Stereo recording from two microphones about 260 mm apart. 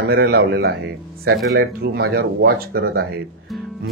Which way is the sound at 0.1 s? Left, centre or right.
Right.